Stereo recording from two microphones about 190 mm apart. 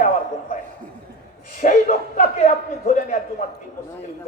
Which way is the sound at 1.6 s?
40° left (ahead or behind).